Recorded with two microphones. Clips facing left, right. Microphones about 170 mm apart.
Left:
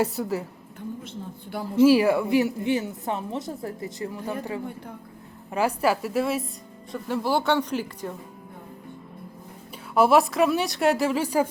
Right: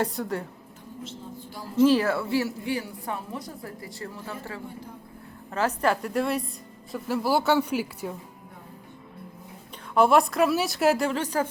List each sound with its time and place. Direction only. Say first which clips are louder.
0.0 s speech: left 3 dB; 5° left (ahead or behind)
1.0 s a sound: left 2 dB; 60° left (ahead or behind)
1.8 s a woman's voice: left 3 dB; 10° left (ahead or behind); by 8.1 s 10° right (ahead or behind)
9.9 s speech: left 1 dB; 5° left (ahead or behind)